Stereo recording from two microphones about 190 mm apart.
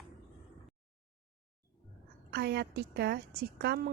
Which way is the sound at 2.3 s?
60° right (ahead or behind).